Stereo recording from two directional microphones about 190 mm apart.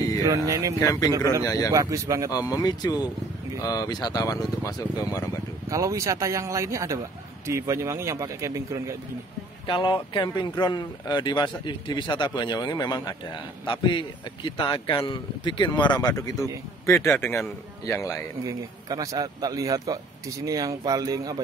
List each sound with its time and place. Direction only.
0.2 s speech: 20° right (ahead or behind)
0.7 s a man's voice: 20° left (ahead or behind)
1.7 s speech: 15° right (ahead or behind)
2.3 s speech: 20° left (ahead or behind)
5.7 s speech: 15° right (ahead or behind)
9.7 s a man's voice: 25° left (ahead or behind)
18.4 s speech: 20° right (ahead or behind)